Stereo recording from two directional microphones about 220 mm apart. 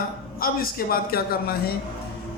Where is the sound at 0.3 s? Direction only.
40° left (ahead or behind).